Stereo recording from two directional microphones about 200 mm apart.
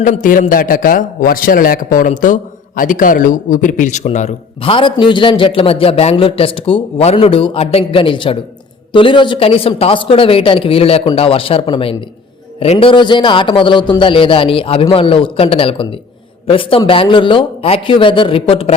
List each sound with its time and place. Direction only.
0.0 s a man's voice: 40° left (ahead or behind)